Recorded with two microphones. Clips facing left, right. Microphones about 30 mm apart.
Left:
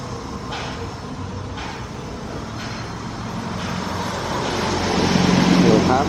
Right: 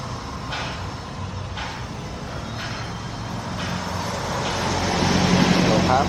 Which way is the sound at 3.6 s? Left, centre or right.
Centre.